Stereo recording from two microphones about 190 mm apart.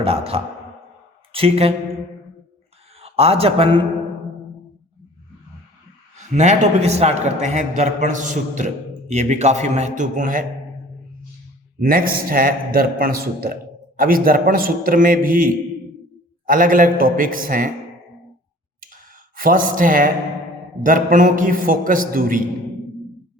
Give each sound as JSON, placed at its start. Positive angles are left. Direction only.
{"t": 0.0, "sound": "speech", "side_deg": -30}
{"t": 3.0, "sound": "a man's voice", "side_deg": -30}
{"t": 6.3, "sound": "a man's voice", "side_deg": -40}
{"t": 11.8, "sound": "a man's voice", "side_deg": -50}
{"t": 19.4, "sound": "a man's voice", "side_deg": -45}